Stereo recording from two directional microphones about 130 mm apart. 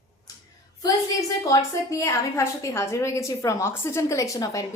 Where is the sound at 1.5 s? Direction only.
25° left (ahead or behind).